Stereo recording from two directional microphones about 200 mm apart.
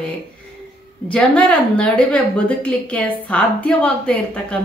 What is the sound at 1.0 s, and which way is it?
A woman's voice, 5° left (ahead or behind).